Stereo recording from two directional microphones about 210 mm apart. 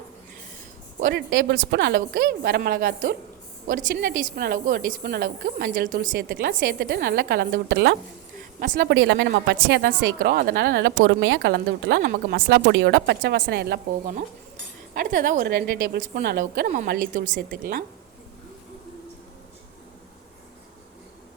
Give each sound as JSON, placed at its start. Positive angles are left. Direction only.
{"t": 1.0, "sound": "a woman's voice", "side_deg": -50}
{"t": 8.4, "sound": "a sound", "side_deg": -40}
{"t": 8.9, "sound": "a woman's voice", "side_deg": -55}
{"t": 14.9, "sound": "a woman's voice", "side_deg": -40}